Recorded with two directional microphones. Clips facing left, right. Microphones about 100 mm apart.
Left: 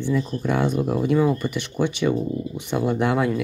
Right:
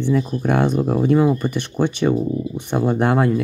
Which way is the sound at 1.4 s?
50° right (ahead or behind).